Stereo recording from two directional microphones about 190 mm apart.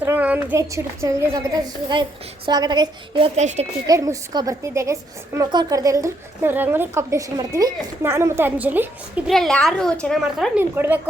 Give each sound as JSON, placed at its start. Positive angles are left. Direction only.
{"t": 0.0, "sound": "a woman's voice", "side_deg": -10}
{"t": 3.8, "sound": "a woman's voice", "side_deg": -15}